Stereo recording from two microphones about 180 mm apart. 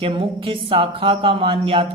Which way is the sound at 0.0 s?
30° right (ahead or behind).